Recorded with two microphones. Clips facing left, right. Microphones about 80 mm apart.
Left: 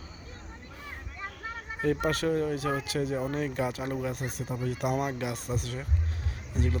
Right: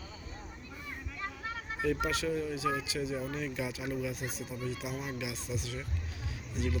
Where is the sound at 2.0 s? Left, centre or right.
Left.